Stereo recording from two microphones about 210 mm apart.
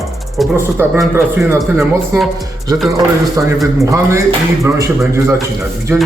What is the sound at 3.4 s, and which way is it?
Speech, 15° right (ahead or behind).